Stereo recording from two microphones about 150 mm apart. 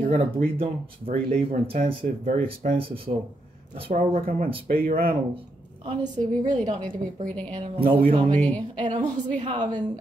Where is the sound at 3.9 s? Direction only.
65° right (ahead or behind).